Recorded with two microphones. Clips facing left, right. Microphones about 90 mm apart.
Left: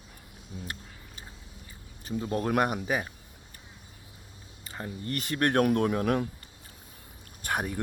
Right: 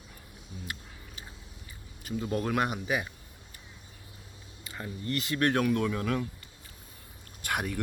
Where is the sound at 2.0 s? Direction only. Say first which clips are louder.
Left 1 dB; 35° left (ahead or behind).